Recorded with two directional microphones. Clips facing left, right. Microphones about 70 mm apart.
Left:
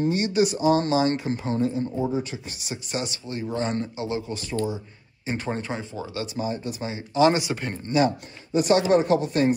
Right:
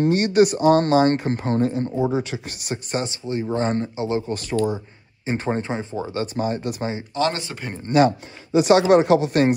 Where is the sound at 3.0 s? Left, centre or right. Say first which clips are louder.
Right 6 dB; right.